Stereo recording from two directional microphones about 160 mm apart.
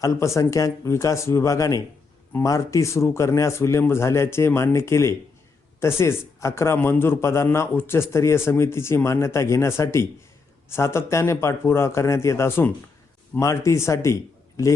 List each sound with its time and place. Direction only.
0.0 s a man's voice: 20° left (ahead or behind)